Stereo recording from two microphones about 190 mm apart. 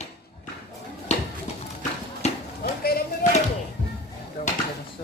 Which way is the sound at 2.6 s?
55° left (ahead or behind).